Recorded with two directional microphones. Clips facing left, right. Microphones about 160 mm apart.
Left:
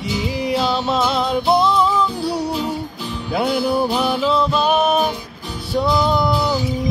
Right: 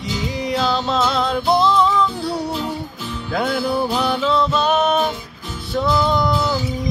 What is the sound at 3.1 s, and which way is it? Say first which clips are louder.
Music: left 1 dB; 15° left (ahead or behind).